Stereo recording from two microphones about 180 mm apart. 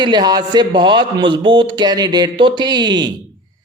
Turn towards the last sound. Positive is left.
turn(degrees=-25)  # may be behind; listen again after turning